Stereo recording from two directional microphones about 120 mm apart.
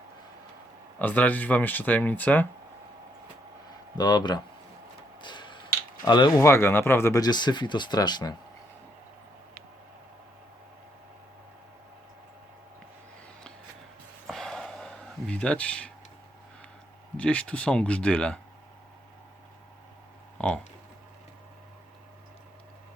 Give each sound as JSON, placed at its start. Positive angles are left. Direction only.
{"t": 0.9, "sound": "speech", "side_deg": 15}
{"t": 3.9, "sound": "speech", "side_deg": 35}
{"t": 5.2, "sound": "a sound", "side_deg": 40}
{"t": 6.4, "sound": "speech", "side_deg": 20}
{"t": 7.2, "sound": "speech", "side_deg": 35}
{"t": 14.3, "sound": "a sound", "side_deg": 5}
{"t": 17.2, "sound": "speech", "side_deg": 10}